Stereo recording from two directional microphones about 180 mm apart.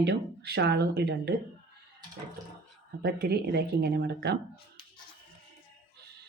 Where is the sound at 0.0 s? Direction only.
70° right (ahead or behind).